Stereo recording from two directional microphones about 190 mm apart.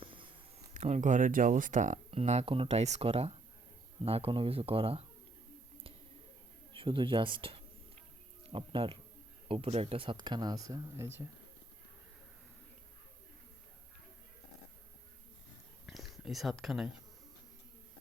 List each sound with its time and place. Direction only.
0.0 s a sound: 25° right (ahead or behind)
0.7 s speech: 40° right (ahead or behind)
6.7 s speech: 25° right (ahead or behind)
15.9 s speech: centre (ahead or behind)